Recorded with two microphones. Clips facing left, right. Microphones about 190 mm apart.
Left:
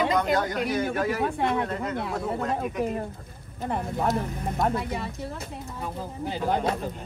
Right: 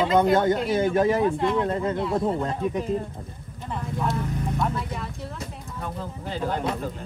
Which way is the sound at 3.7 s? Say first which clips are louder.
Left 2 dB; 50° left (ahead or behind).